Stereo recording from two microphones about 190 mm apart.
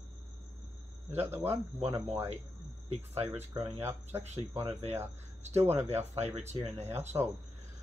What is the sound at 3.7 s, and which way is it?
Speech, 10° right (ahead or behind).